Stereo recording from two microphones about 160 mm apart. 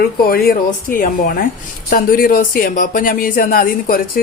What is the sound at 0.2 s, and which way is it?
A woman's voice, 70° left (ahead or behind).